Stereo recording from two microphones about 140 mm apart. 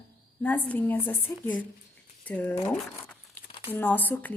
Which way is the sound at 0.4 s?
15° left (ahead or behind).